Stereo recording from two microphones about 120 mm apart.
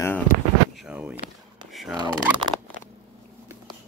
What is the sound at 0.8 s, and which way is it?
Speech, 10° right (ahead or behind).